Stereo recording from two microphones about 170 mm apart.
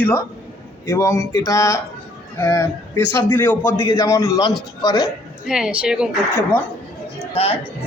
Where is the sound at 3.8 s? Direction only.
25° left (ahead or behind).